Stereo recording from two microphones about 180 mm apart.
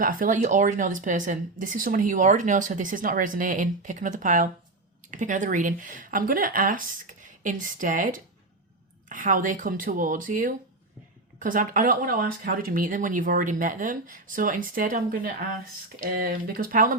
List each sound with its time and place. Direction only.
0.0 s speech: 50° right (ahead or behind)